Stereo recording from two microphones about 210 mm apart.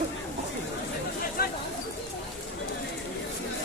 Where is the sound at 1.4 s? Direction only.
45° left (ahead or behind).